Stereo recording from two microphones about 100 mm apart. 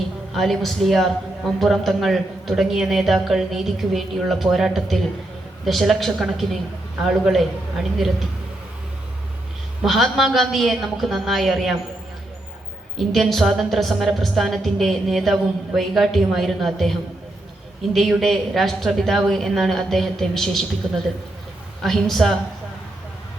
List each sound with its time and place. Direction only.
0.3 s a woman's voice: centre (ahead or behind)
9.8 s a woman's voice: centre (ahead or behind)
13.0 s a woman's voice: centre (ahead or behind)
18.1 s a woman's voice: centre (ahead or behind)
21.8 s a woman's voice: 5° left (ahead or behind)